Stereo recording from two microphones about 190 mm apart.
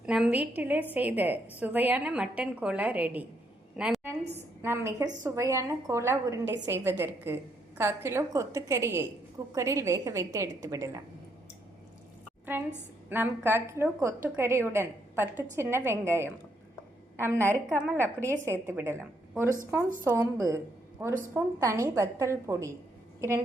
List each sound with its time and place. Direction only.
0.0 s a woman's voice: 5° right (ahead or behind)
3.8 s a sound: 5° right (ahead or behind)
4.6 s a woman's voice: 15° right (ahead or behind)
12.5 s a woman's voice: 10° right (ahead or behind)